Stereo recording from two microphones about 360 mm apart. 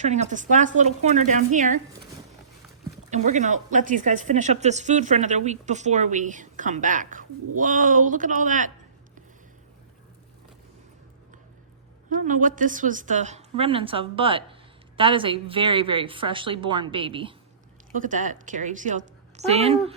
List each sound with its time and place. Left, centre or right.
0.0 s speech: centre
3.1 s speech: centre
12.1 s a woman's voice: right